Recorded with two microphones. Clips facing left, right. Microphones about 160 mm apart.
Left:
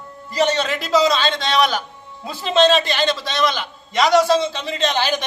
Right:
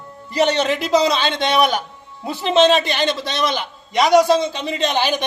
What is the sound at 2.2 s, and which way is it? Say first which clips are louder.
A man's voice: right 1 dB; 20° right (ahead or behind).